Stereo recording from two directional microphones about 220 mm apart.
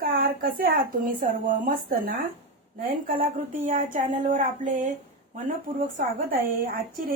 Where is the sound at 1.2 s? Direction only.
35° right (ahead or behind).